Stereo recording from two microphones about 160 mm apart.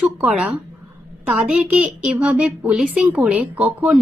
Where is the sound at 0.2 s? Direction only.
10° right (ahead or behind).